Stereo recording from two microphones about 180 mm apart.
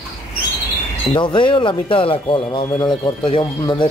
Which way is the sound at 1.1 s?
25° left (ahead or behind).